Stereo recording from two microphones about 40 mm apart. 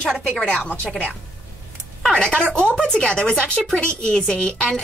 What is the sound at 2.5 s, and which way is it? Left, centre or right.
A woman's voice, left.